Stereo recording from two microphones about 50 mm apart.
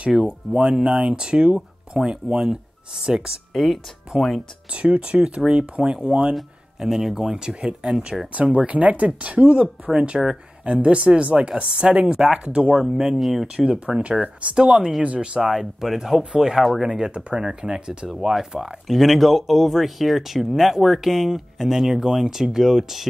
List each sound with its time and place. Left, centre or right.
0.1 s speech: centre
3.5 s speech: centre
4.1 s speech: centre
6.3 s speech: centre
8.3 s speech: right
12.8 s speech: centre
13.6 s speech: right
15.4 s speech: centre
16.0 s speech: centre
16.6 s speech: centre
16.9 s speech: centre